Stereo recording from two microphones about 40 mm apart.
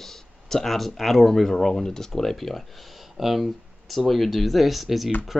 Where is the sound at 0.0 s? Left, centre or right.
Centre.